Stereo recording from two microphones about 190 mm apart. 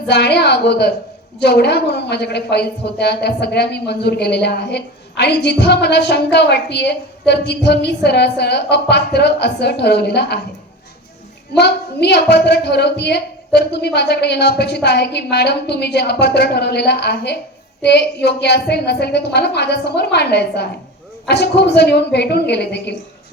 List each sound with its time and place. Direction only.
0.1 s a woman's voice: 60° left (ahead or behind)
11.5 s a woman's voice: 60° left (ahead or behind)